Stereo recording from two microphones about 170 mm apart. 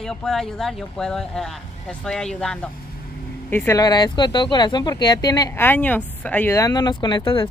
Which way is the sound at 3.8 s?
25° left (ahead or behind).